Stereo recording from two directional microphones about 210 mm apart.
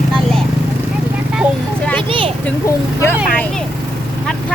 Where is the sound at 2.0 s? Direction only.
25° right (ahead or behind).